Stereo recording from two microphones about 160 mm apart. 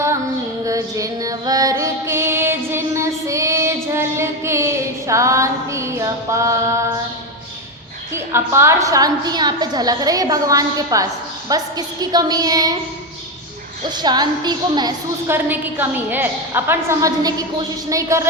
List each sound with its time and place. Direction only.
0.6 s female singing: 20° right (ahead or behind)
8.1 s a woman's voice: 15° right (ahead or behind)
13.8 s a woman's voice: 25° right (ahead or behind)
15.3 s a woman's voice: 10° right (ahead or behind)